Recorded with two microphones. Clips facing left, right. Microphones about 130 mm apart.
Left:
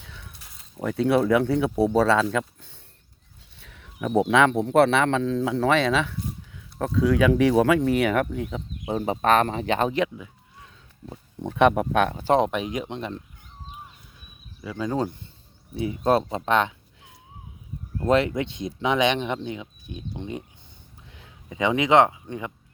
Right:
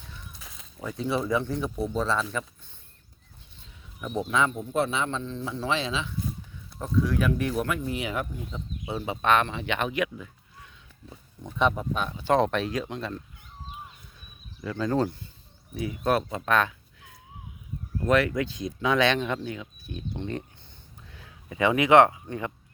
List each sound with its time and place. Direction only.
0.0 s a sound: 90° left
0.9 s a man's voice: 65° left (ahead or behind); by 2.4 s 85° left
3.6 s a man's voice: 75° left (ahead or behind)
6.7 s speech: 90° left; by 8.9 s 75° left (ahead or behind)
8.9 s speech: 45° left (ahead or behind)
11.0 s speech: 50° left (ahead or behind)
11.4 s a man's voice: 65° left (ahead or behind)
12.3 s speech: 15° left (ahead or behind)
14.6 s speech: 10° left (ahead or behind)
15.7 s speech: 25° left (ahead or behind)
17.9 s speech: 25° left (ahead or behind)
21.1 s speech: 25° left (ahead or behind)